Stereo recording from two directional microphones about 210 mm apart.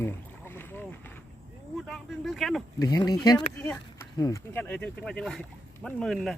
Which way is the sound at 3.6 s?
5° left (ahead or behind).